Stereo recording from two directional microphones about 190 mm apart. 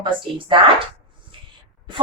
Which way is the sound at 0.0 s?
25° right (ahead or behind).